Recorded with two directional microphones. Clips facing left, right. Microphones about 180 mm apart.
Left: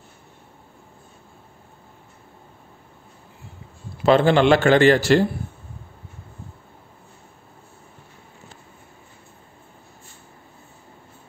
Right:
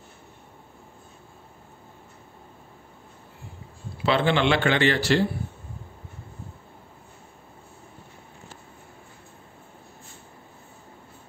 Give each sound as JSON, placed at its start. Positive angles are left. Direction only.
{"t": 4.0, "sound": "speech", "side_deg": 45}